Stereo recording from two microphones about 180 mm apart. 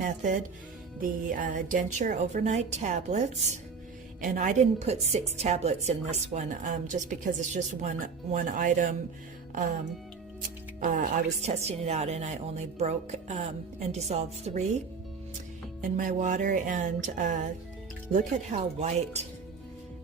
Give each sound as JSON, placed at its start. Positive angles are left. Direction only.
{"t": 0.0, "sound": "a woman's voice", "side_deg": -45}
{"t": 10.8, "sound": "a woman's voice", "side_deg": -50}
{"t": 16.0, "sound": "a woman's voice", "side_deg": -45}